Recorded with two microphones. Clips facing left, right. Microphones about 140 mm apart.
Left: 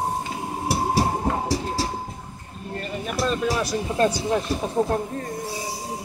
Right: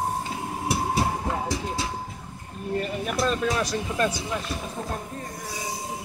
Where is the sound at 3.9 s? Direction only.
30° left (ahead or behind).